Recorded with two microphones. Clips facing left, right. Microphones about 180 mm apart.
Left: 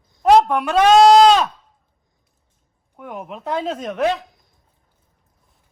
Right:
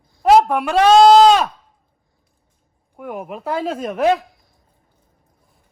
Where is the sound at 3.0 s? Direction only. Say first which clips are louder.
Right 3 dB; 5° right (ahead or behind).